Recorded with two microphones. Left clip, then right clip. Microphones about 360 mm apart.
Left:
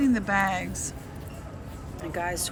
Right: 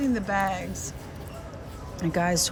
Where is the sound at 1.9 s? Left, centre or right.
Centre.